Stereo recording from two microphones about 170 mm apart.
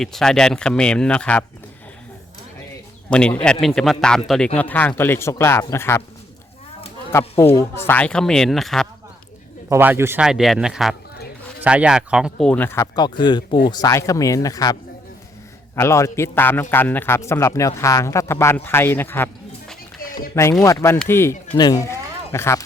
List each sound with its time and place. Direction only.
0.0 s speech: 5° left (ahead or behind)
3.1 s a man's voice: 5° left (ahead or behind)
7.1 s speech: 15° left (ahead or behind)
9.6 s a man's voice: 15° right (ahead or behind)
10.2 s speech: centre (ahead or behind)
12.5 s a man's voice: 10° left (ahead or behind)
21.5 s speech: 25° left (ahead or behind)